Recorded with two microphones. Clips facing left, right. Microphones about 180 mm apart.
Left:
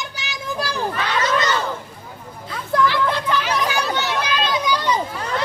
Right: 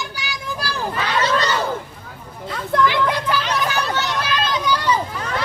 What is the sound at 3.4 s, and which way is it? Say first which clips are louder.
Chatter: even; centre (ahead or behind).